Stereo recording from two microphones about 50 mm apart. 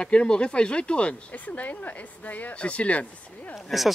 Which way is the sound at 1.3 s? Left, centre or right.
Left.